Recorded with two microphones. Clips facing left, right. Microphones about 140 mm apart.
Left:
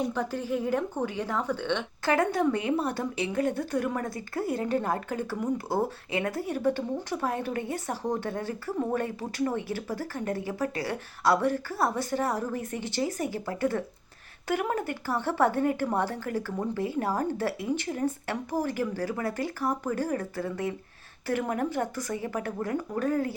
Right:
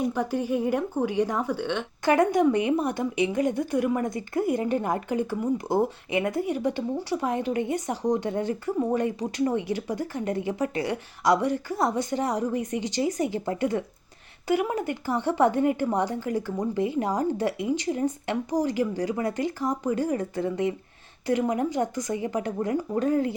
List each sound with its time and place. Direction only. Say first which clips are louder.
0.0 s speech: right 4 dB; 15° right (ahead or behind)